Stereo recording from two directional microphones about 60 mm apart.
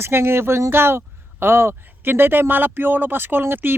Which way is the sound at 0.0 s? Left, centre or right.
Right.